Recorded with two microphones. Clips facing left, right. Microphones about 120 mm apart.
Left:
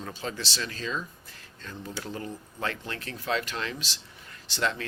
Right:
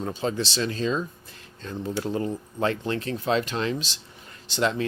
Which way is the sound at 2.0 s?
25° right (ahead or behind).